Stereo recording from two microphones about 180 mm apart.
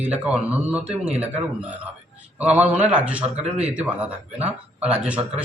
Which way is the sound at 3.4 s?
35° right (ahead or behind).